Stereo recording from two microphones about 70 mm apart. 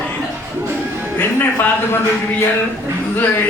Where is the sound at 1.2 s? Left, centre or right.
Left.